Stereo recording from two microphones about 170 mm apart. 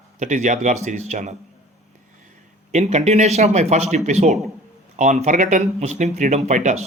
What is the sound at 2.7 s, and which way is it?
A man's voice, 40° right (ahead or behind).